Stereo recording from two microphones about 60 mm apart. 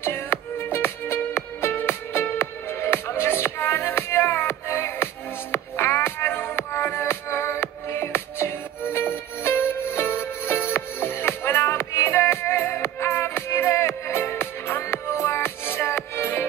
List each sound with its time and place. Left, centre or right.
0.0 s music: left